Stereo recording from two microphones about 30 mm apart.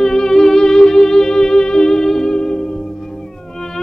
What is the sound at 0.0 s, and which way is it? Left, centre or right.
Music, centre.